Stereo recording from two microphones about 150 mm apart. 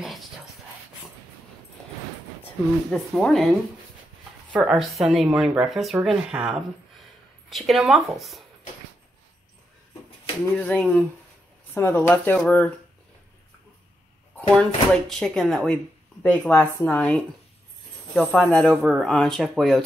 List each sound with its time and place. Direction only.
0.0 s dog: centre (ahead or behind)
2.9 s speech: 5° left (ahead or behind)
4.5 s speech: 5° right (ahead or behind)
10.6 s speech: 10° left (ahead or behind)
14.3 s speech: 5° left (ahead or behind)